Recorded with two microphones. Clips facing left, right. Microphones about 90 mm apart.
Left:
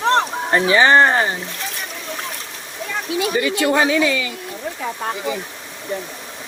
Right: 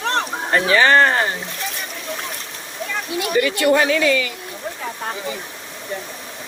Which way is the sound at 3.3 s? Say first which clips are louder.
Right 3 dB; 20° left (ahead or behind).